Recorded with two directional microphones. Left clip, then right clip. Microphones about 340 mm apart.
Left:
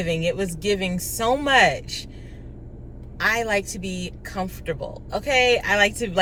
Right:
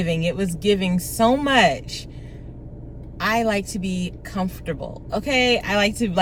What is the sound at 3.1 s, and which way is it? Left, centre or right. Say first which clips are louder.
A woman's voice: right 1 dB; centre.